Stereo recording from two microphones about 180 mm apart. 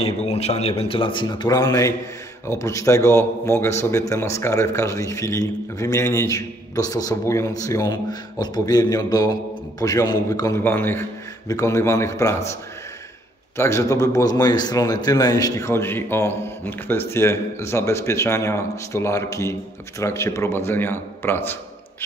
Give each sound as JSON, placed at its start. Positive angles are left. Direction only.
{"t": 0.0, "sound": "a man's voice", "side_deg": 35}
{"t": 13.6, "sound": "a man's voice", "side_deg": 15}